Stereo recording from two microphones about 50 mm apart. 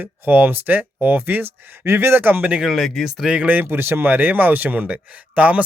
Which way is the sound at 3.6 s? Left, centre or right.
Right.